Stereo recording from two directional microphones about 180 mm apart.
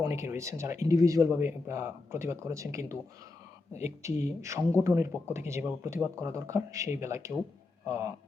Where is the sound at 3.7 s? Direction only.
40° left (ahead or behind).